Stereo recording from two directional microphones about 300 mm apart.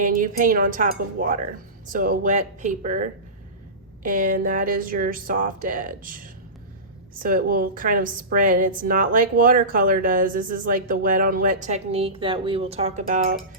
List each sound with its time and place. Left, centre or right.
0.0 s a woman's voice: right